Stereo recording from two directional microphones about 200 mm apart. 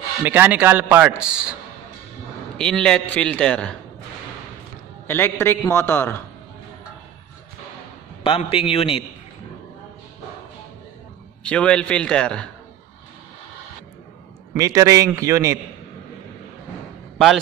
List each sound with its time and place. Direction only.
0.2 s a man's voice: 10° right (ahead or behind)
5.0 s a man's voice: 10° left (ahead or behind)
8.2 s a man's voice: 25° left (ahead or behind)
11.4 s a man's voice: 5° left (ahead or behind)
14.5 s a man's voice: 15° right (ahead or behind)